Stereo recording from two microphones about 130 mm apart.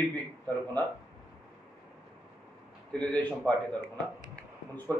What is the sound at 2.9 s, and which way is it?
Speech, 10° left (ahead or behind).